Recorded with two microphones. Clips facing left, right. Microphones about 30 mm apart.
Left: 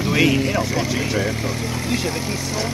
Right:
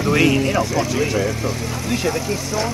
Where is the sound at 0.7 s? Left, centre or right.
Centre.